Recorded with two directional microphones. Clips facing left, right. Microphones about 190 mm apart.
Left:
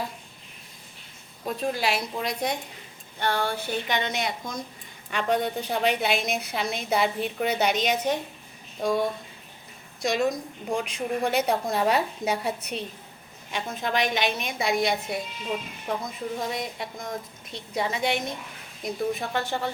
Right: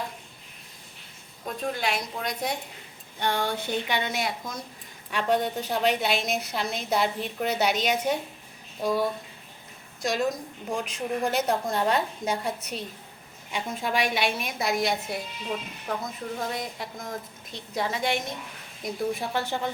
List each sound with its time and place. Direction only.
1.5 s a woman's voice: 5° left (ahead or behind)
3.2 s a woman's voice: 15° right (ahead or behind); by 12.8 s centre (ahead or behind)
13.5 s a woman's voice: 10° right (ahead or behind)
16.4 s a woman's voice: centre (ahead or behind)